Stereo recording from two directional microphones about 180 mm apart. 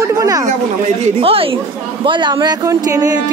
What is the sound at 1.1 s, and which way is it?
Speech, 30° right (ahead or behind).